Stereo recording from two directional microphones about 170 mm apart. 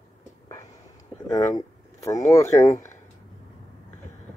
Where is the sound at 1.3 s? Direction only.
20° left (ahead or behind).